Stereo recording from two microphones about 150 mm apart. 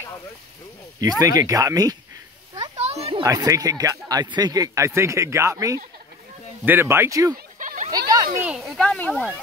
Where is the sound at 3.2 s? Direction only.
20° right (ahead or behind).